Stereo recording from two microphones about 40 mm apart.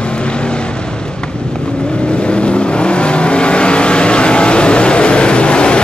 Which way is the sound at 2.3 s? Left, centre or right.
Left.